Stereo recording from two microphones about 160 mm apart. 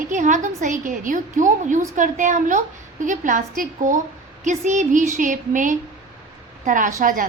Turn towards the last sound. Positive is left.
turn(degrees=-55)  # may be behind; listen again after turning